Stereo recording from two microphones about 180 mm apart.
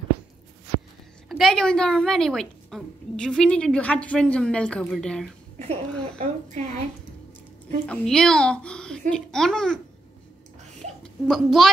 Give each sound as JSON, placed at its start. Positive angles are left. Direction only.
{"t": 1.3, "sound": "a woman's voice", "side_deg": 0}
{"t": 6.1, "sound": "speech", "side_deg": -45}
{"t": 7.8, "sound": "a woman's voice", "side_deg": 5}
{"t": 11.2, "sound": "a woman's voice", "side_deg": 0}